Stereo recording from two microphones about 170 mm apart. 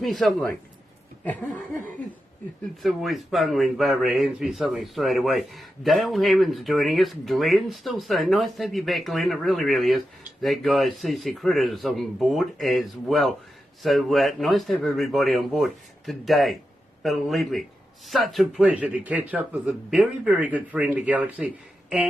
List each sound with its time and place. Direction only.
0.0 s speech: centre (ahead or behind)
1.2 s a sound: 10° left (ahead or behind)
2.8 s speech: centre (ahead or behind)